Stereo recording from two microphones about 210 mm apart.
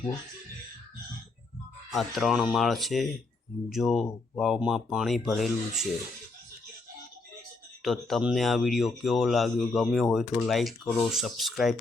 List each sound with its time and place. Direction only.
2.0 s speech: centre (ahead or behind)
7.8 s speech: centre (ahead or behind)